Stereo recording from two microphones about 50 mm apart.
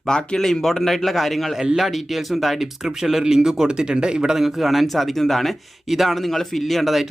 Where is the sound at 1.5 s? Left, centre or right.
Centre.